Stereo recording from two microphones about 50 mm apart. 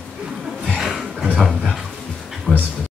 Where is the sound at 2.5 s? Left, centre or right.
Centre.